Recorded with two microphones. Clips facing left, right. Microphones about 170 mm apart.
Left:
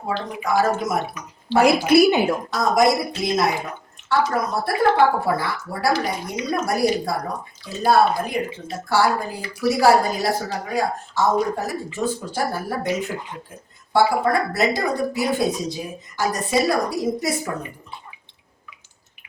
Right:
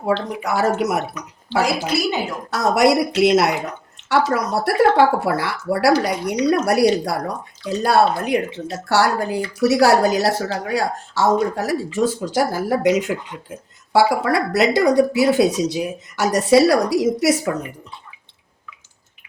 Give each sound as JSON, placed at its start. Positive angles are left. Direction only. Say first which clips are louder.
{"t": 0.4, "sound": "speech", "louder": "right 1 dB", "side_deg": -75}
{"t": 1.6, "sound": "a woman's voice", "louder": "left 9 dB", "side_deg": 55}
{"t": 2.5, "sound": "speech", "louder": "right 5 dB", "side_deg": -70}